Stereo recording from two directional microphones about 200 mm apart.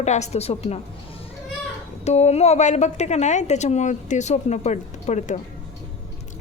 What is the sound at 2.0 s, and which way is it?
A child's voice, 35° left (ahead or behind).